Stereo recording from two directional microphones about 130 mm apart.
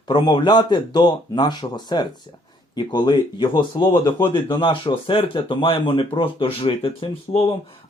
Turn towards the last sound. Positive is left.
turn(degrees=45)  # may be behind; listen again after turning